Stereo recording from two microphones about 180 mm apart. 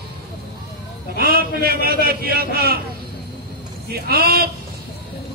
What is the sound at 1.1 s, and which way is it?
A man's voice, 55° right (ahead or behind).